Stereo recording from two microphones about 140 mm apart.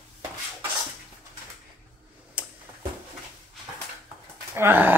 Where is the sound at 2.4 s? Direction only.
10° right (ahead or behind).